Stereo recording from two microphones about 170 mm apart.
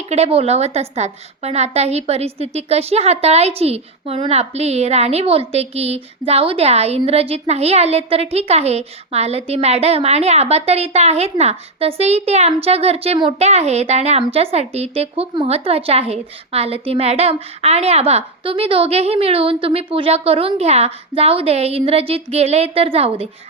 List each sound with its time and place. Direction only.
0.1 s a woman's voice: 35° right (ahead or behind)